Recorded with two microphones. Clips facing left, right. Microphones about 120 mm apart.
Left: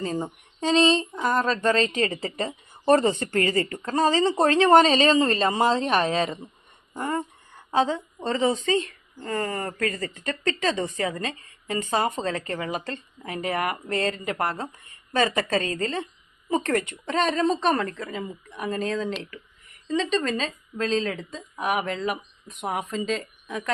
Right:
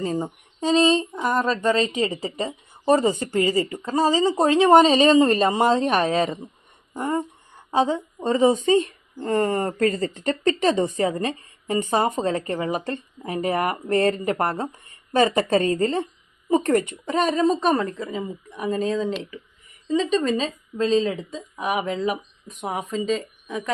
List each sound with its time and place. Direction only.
0.0 s a woman's voice: 15° right (ahead or behind)